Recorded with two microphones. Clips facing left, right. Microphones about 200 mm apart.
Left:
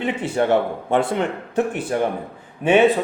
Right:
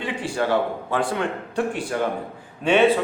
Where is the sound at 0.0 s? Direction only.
20° left (ahead or behind).